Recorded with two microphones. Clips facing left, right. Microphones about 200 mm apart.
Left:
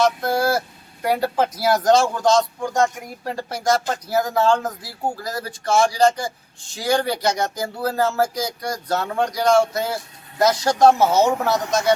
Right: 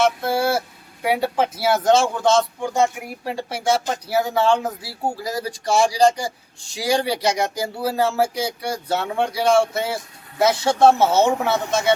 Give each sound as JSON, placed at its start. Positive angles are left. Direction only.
{"t": 0.0, "sound": "speech", "side_deg": -5}
{"t": 11.0, "sound": "speech", "side_deg": -25}
{"t": 11.3, "sound": "speech", "side_deg": -5}